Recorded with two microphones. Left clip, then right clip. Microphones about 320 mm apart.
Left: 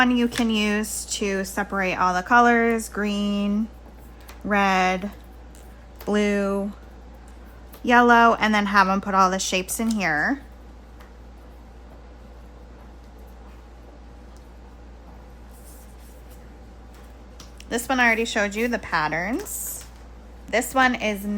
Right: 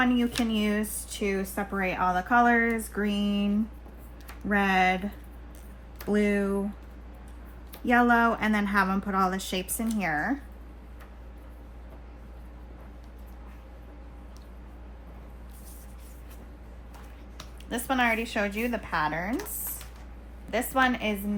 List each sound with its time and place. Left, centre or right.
0.0 s a woman's voice: left
6.1 s a woman's voice: left
7.9 s a woman's voice: left
17.3 s speech: left
20.5 s a woman's voice: left